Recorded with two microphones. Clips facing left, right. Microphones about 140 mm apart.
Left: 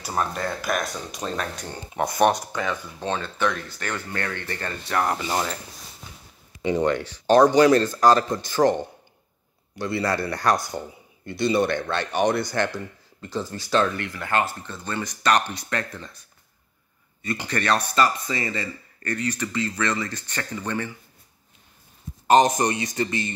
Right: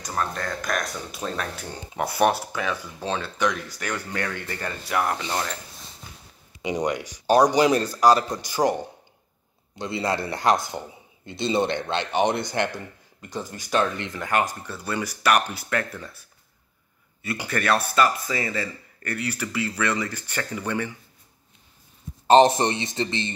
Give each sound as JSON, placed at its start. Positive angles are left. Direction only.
{"t": 0.0, "sound": "speech", "side_deg": 10}
{"t": 5.0, "sound": "speech", "side_deg": 5}
{"t": 6.6, "sound": "a man's voice", "side_deg": -15}
{"t": 17.2, "sound": "speech", "side_deg": -5}
{"t": 22.3, "sound": "a man's voice", "side_deg": -30}